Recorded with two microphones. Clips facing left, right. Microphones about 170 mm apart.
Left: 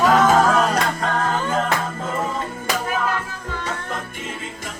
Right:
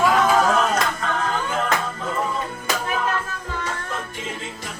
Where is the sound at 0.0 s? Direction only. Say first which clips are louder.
Left 3 dB; 45° left (ahead or behind).